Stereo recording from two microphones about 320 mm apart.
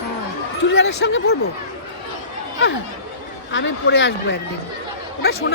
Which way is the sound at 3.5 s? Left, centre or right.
Left.